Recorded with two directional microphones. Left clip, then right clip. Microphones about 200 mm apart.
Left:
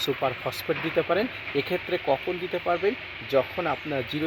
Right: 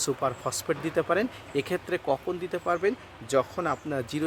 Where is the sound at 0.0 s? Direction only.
5° right (ahead or behind).